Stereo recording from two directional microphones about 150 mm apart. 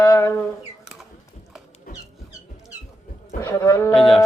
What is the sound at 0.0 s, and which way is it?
Rodents, 15° left (ahead or behind).